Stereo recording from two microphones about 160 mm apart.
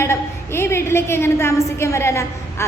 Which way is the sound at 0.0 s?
15° left (ahead or behind).